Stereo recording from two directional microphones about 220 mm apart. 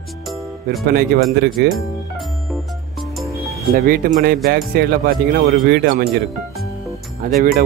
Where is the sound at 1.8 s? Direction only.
Centre (ahead or behind).